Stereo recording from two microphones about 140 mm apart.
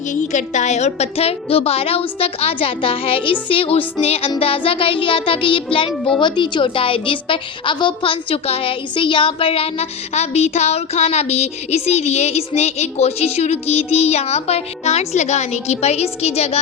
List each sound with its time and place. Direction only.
0.1 s a woman's voice: 60° left (ahead or behind)
4.4 s music: 40° left (ahead or behind)
6.1 s a woman's voice: 35° left (ahead or behind)